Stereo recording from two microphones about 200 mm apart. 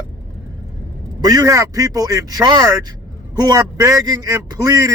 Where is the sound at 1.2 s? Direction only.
20° right (ahead or behind).